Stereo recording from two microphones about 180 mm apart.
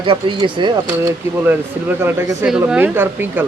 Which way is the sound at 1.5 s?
10° right (ahead or behind).